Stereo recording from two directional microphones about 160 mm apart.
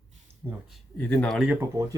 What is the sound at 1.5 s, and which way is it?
Speech, 15° right (ahead or behind).